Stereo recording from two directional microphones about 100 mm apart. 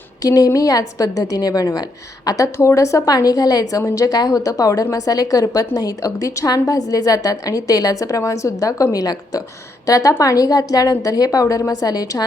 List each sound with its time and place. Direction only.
0.2 s a woman's voice: 35° left (ahead or behind)